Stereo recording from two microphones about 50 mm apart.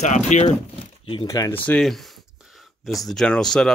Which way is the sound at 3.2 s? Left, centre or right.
Centre.